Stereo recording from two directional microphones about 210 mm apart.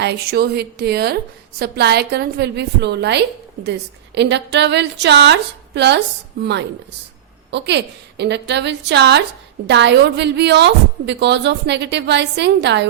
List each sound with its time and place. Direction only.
0.0 s a woman's voice: 50° right (ahead or behind)